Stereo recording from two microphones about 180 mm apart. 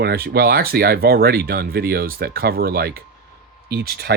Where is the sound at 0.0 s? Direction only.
65° right (ahead or behind).